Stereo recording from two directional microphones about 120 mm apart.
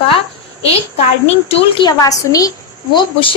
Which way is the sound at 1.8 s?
30° left (ahead or behind).